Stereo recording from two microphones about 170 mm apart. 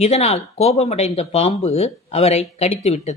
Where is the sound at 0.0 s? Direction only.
40° left (ahead or behind).